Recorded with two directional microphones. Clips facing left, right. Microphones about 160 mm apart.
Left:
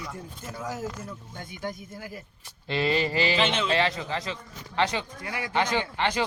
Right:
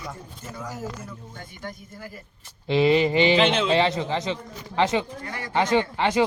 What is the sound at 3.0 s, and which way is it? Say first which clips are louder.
A man's voice: right 6 dB; 20° right (ahead or behind).